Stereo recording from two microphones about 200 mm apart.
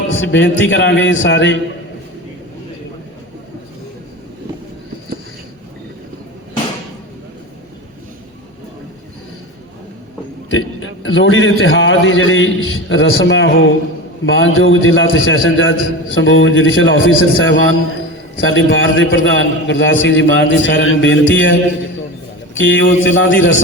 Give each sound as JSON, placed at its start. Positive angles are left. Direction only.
{"t": 0.1, "sound": "a man's voice", "side_deg": 65}
{"t": 10.5, "sound": "a man's voice", "side_deg": 75}